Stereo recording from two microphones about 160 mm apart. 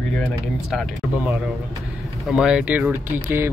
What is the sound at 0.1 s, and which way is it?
Speech, 5° left (ahead or behind).